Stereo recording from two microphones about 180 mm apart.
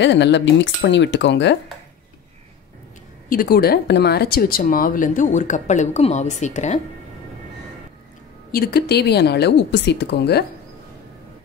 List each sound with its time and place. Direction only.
0.0 s speech: 80° left
3.3 s speech: 55° left (ahead or behind)
8.5 s speech: 60° left (ahead or behind)